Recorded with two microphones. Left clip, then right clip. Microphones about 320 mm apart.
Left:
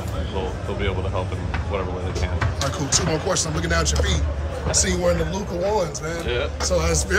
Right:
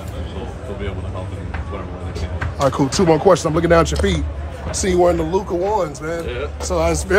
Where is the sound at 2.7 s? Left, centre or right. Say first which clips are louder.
Right 9 dB; centre.